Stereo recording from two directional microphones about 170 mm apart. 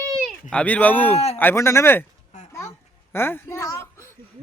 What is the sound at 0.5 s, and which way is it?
Speech, 10° left (ahead or behind).